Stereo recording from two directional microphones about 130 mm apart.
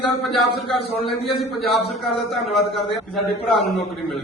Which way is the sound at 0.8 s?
50° left (ahead or behind).